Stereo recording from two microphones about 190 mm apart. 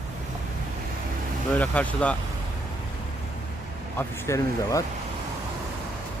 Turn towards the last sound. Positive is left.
turn(degrees=15)  # may be behind; listen again after turning